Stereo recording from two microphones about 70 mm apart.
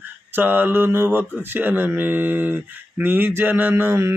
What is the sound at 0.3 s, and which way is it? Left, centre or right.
Mantra, right.